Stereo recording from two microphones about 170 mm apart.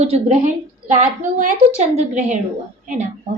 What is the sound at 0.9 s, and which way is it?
A woman's voice, 50° right (ahead or behind).